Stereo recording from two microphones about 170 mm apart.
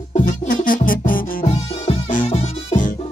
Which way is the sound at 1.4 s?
35° left (ahead or behind).